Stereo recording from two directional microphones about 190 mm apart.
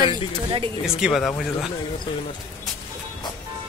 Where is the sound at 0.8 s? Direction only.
Centre (ahead or behind).